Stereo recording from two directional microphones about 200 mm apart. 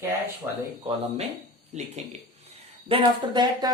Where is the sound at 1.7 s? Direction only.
35° right (ahead or behind).